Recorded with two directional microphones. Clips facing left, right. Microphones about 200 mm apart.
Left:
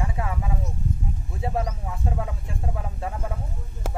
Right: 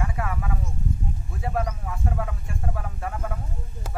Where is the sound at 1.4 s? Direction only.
25° left (ahead or behind).